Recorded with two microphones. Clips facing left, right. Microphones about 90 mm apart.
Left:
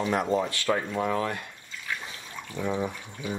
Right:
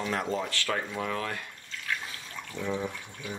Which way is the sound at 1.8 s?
15° left (ahead or behind).